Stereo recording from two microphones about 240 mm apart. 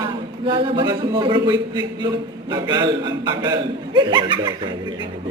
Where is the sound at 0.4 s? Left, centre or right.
Centre.